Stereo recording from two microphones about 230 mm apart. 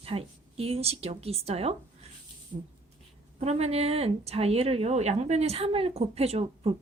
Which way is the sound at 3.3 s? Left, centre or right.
Right.